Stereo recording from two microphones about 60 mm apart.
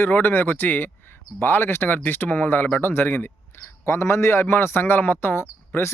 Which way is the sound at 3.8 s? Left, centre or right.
Left.